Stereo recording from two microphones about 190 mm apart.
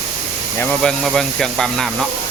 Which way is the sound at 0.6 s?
5° left (ahead or behind).